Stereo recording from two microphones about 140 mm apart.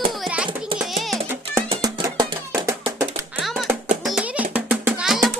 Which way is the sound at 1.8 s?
25° right (ahead or behind).